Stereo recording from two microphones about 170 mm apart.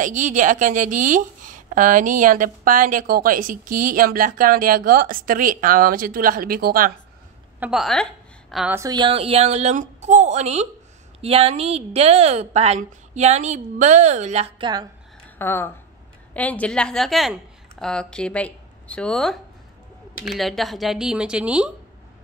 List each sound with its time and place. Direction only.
0.0 s a woman's voice: 50° right (ahead or behind)
7.6 s a woman's voice: centre (ahead or behind)
8.7 s a woman's voice: 25° right (ahead or behind); by 14.5 s 40° right (ahead or behind)
14.6 s a woman's voice: 25° right (ahead or behind)
15.3 s a woman's voice: 15° left (ahead or behind); by 21.7 s 5° right (ahead or behind)